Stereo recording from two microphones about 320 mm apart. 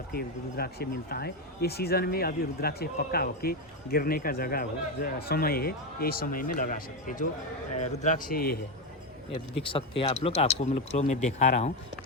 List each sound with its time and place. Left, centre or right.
0.1 s speech: left
9.6 s speech: centre